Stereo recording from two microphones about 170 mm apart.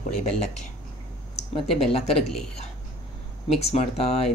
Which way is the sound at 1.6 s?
Centre (ahead or behind).